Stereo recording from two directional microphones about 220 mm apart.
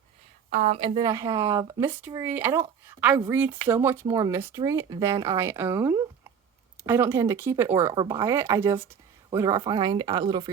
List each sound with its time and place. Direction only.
0.5 s speech: 30° right (ahead or behind)